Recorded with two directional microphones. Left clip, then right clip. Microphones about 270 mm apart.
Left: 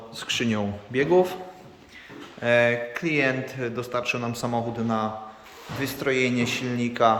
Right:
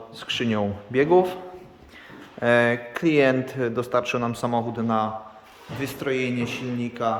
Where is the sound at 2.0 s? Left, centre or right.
Centre.